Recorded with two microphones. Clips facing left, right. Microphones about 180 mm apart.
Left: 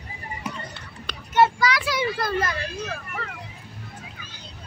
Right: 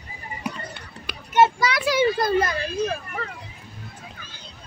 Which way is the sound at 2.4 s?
30° right (ahead or behind).